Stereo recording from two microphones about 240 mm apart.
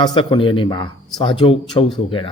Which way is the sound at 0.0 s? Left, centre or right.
Centre.